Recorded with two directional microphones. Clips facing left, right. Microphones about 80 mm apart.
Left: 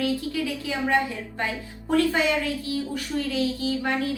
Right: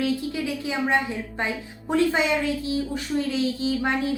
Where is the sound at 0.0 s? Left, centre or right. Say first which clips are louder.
Right 1 dB; right.